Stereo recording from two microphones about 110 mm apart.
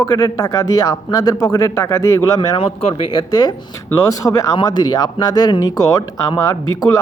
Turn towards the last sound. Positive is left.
turn(degrees=30)  # may be behind; listen again after turning